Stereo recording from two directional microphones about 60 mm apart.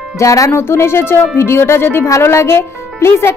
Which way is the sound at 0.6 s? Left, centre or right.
Left.